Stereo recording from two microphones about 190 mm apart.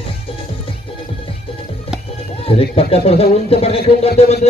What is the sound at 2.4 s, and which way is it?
Speech, 30° left (ahead or behind).